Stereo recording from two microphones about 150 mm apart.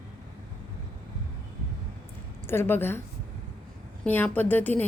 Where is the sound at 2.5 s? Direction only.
15° left (ahead or behind).